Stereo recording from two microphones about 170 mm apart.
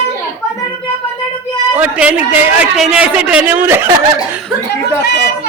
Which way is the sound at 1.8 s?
5° right (ahead or behind).